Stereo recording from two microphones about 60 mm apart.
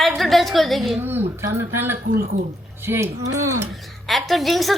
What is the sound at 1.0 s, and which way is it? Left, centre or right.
Speech, right.